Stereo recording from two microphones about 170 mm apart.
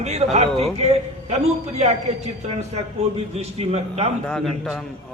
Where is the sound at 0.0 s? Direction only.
40° right (ahead or behind).